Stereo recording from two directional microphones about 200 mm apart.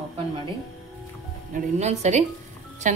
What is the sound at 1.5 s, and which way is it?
Speech, 40° right (ahead or behind).